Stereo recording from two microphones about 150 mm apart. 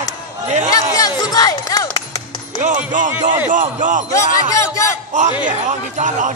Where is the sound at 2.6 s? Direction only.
55° right (ahead or behind).